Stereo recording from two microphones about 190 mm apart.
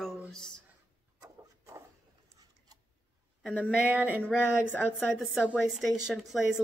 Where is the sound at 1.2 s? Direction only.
15° right (ahead or behind).